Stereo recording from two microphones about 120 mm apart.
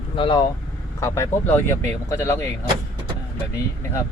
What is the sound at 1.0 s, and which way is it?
Speech, 20° left (ahead or behind).